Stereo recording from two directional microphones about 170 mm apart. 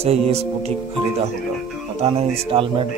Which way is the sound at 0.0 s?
40° right (ahead or behind).